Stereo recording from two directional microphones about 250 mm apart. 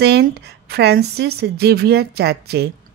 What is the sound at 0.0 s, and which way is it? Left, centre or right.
A woman's voice, right.